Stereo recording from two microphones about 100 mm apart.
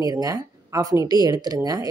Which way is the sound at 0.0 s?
40° right (ahead or behind).